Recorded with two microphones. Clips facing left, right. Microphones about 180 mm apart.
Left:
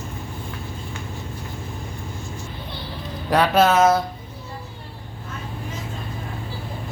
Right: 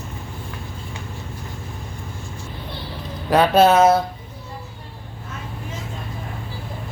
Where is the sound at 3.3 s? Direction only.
25° right (ahead or behind).